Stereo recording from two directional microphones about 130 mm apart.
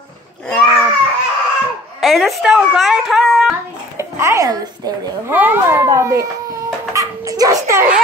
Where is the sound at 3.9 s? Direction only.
20° right (ahead or behind).